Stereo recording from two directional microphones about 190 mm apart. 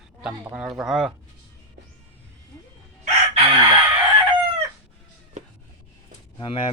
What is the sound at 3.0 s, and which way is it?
Chicken, 30° right (ahead or behind).